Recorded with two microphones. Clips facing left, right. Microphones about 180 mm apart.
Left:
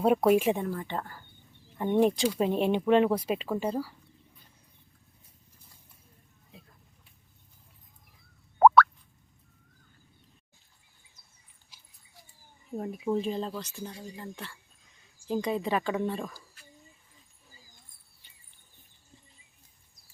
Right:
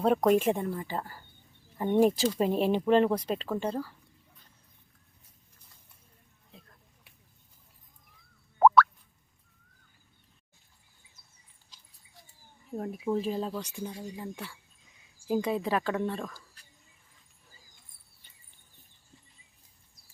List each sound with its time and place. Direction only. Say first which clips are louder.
0.0 s speech: left 1 dB; 5° left (ahead or behind)
6.5 s a sound: left 1 dB; centre (ahead or behind)
8.5 s plop: left 2 dB; 55° left (ahead or behind)
12.6 s speech: left 1 dB; centre (ahead or behind)